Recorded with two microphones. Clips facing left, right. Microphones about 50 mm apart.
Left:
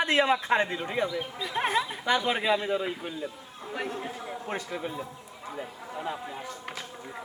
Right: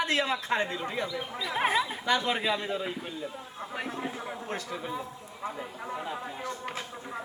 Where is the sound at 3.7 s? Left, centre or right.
Centre.